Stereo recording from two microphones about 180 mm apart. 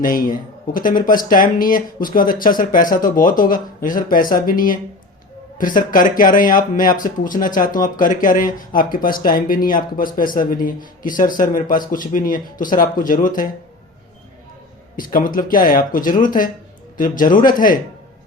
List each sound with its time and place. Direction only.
0.0 s speech: 50° left (ahead or behind)
14.9 s speech: 50° left (ahead or behind)